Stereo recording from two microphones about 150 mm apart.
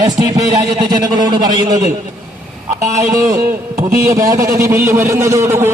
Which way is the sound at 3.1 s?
20° right (ahead or behind).